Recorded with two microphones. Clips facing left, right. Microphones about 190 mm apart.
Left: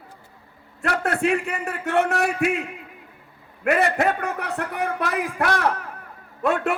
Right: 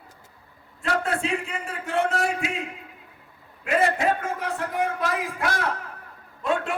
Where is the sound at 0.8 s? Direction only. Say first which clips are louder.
Left 3 dB; 65° left (ahead or behind).